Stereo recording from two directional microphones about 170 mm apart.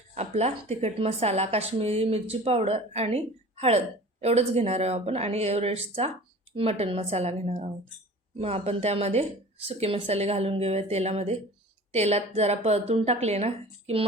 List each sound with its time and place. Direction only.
0.1 s speech: 40° right (ahead or behind)